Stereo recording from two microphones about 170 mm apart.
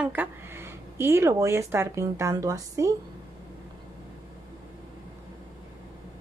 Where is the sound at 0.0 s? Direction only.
10° right (ahead or behind).